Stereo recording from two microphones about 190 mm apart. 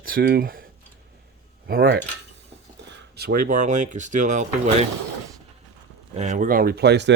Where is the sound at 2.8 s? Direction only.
60° right (ahead or behind); by 4.8 s 35° right (ahead or behind).